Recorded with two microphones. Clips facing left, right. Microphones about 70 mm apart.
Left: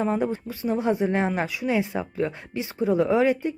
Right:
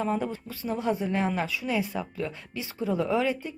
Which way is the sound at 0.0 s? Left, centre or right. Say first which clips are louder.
Left 4 dB; left.